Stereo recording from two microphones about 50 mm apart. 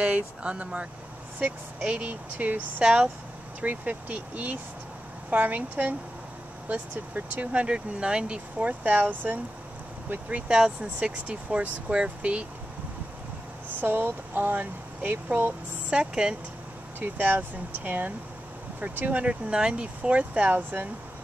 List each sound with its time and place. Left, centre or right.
0.0 s speech: right
1.9 s speech: right
2.8 s speech: right
3.6 s speech: right
7.6 s speech: centre
8.5 s speech: right
8.9 s speech: right
10.5 s speech: right
13.7 s speech: right
15.9 s speech: centre
17.0 s speech: right
19.5 s speech: right